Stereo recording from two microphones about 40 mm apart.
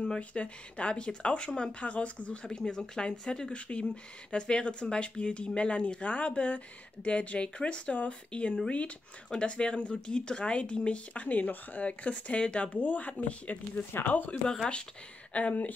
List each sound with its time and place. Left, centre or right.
0.2 s speech: left
13.9 s speech: left
15.3 s speech: left